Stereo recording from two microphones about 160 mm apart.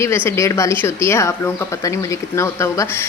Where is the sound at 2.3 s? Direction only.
15° left (ahead or behind).